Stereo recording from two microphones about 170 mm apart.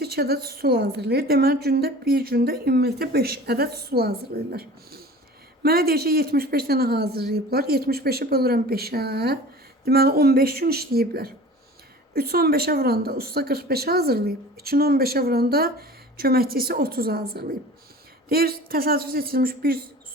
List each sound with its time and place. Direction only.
0.0 s a woman's voice: 70° right (ahead or behind)